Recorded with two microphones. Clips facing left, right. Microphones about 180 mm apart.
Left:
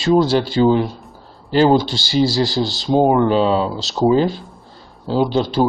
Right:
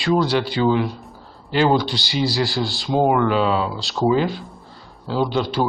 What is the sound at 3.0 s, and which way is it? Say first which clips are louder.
Speech: left 3 dB; 30° left (ahead or behind).